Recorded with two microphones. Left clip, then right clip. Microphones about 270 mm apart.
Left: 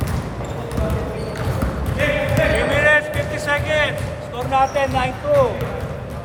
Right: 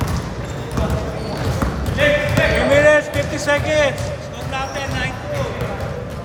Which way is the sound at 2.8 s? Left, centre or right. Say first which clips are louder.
Right 2 dB; centre.